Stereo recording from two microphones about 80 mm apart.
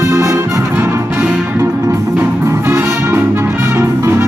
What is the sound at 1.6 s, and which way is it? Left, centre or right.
Music, right.